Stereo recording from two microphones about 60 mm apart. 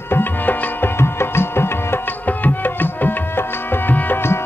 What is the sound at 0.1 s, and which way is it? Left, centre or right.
Music, left.